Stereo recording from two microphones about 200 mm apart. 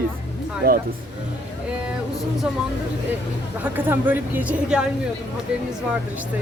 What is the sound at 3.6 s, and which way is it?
A woman's voice, 10° right (ahead or behind).